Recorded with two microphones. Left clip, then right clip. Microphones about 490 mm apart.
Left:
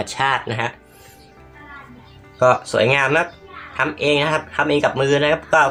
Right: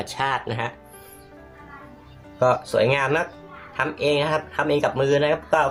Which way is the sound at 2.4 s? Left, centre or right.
Right.